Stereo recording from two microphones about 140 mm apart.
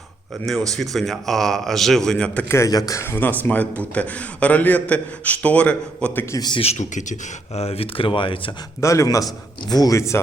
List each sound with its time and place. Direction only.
0.7 s a man's voice: centre (ahead or behind)
6.3 s a man's voice: 30° left (ahead or behind)
6.6 s speech: 55° left (ahead or behind); by 8.4 s 35° left (ahead or behind)
8.8 s a man's voice: 20° left (ahead or behind)